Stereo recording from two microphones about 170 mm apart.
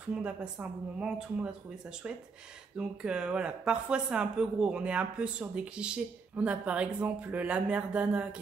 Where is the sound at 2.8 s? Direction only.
5° right (ahead or behind).